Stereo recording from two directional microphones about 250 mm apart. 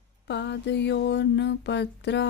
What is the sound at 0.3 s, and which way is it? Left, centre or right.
Mantra, left.